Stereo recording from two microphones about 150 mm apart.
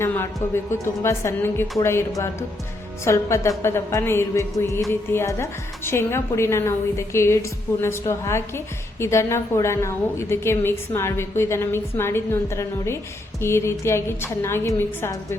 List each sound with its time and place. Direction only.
0.0 s a woman's voice: 15° left (ahead or behind)